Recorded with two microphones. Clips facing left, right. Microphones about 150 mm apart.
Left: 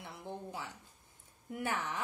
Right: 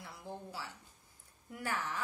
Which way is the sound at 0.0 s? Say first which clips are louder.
Left 2 dB; 25° left (ahead or behind).